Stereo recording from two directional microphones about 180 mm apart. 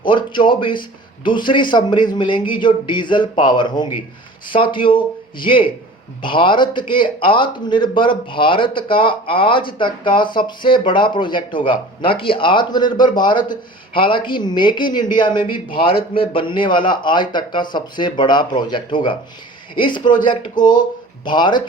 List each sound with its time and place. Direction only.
0.1 s a man's voice: 25° left (ahead or behind)